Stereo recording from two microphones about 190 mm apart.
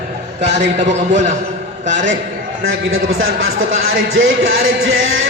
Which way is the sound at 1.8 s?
75° right (ahead or behind).